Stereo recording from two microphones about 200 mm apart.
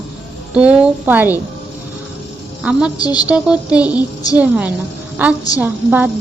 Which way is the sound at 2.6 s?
5° right (ahead or behind).